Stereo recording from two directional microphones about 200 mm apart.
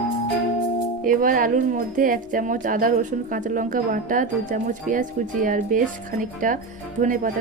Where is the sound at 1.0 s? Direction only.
45° right (ahead or behind).